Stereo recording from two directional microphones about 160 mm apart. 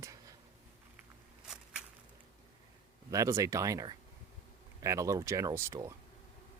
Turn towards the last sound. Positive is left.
turn(degrees=-20)  # may be behind; listen again after turning